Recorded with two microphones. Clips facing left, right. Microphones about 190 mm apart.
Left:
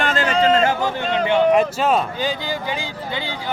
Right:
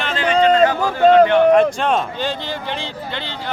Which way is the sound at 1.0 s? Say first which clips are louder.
Right 11 dB; 45° right (ahead or behind).